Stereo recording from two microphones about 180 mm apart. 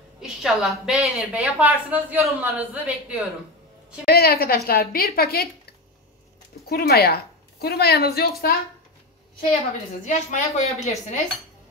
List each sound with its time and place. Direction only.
0.2 s a woman's voice: centre (ahead or behind)
4.0 s a woman's voice: 60° left (ahead or behind)
6.7 s a woman's voice: 60° left (ahead or behind)
10.0 s speech: 40° left (ahead or behind)
10.8 s dishes: 40° left (ahead or behind)